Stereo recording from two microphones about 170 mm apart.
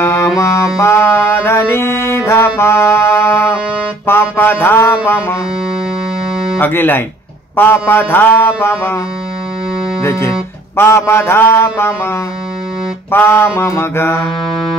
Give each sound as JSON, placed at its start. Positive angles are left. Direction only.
{"t": 0.0, "sound": "music", "side_deg": 15}
{"t": 6.6, "sound": "music", "side_deg": 10}
{"t": 10.0, "sound": "music", "side_deg": 15}
{"t": 14.2, "sound": "music", "side_deg": 5}